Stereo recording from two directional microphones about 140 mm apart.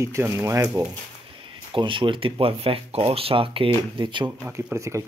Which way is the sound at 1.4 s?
40° right (ahead or behind).